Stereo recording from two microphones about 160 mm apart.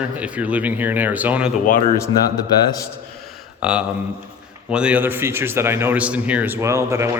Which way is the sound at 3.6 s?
5° right (ahead or behind).